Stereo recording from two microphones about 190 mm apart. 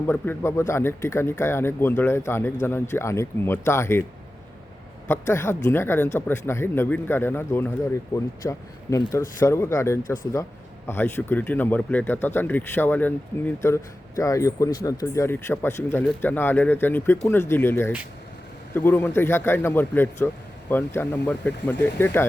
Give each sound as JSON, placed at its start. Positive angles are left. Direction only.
{"t": 0.1, "sound": "speech", "side_deg": 10}
{"t": 5.0, "sound": "speech", "side_deg": 15}